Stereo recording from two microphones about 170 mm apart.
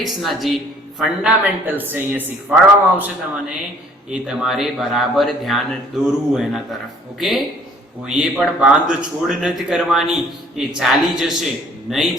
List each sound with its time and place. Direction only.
0.0 s a woman's voice: centre (ahead or behind)
4.1 s speech: centre (ahead or behind)